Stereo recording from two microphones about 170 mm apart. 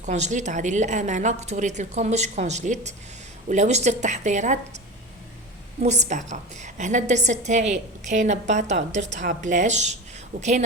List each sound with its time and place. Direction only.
0.0 s a woman's voice: 45° right (ahead or behind)
5.8 s a woman's voice: 40° right (ahead or behind)